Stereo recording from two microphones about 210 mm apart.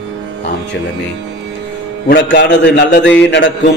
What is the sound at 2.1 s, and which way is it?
Speech, 55° left (ahead or behind).